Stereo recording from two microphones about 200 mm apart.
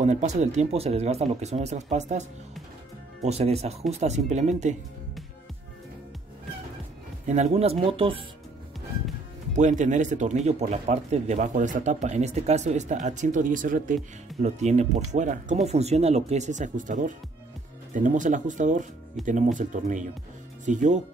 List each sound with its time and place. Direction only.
0.0 s speech: 35° right (ahead or behind)
7.2 s speech: 35° right (ahead or behind)
9.6 s speech: 35° right (ahead or behind)